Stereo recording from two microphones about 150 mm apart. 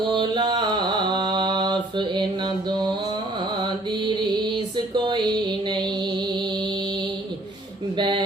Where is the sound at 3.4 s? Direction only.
30° right (ahead or behind).